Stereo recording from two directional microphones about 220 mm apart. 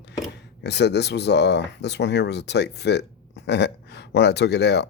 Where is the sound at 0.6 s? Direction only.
50° left (ahead or behind).